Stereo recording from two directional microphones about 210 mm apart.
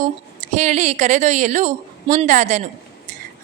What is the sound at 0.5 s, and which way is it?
A woman's voice, 35° right (ahead or behind).